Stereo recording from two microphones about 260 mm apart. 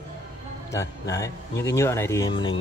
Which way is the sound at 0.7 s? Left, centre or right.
Centre.